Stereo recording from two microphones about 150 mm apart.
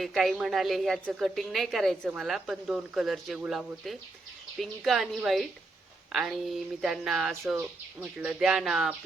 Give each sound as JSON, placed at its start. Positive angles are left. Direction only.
{"t": 0.0, "sound": "a woman's voice", "side_deg": 0}